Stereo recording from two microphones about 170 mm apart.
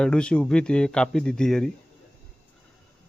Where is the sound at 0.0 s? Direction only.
5° left (ahead or behind).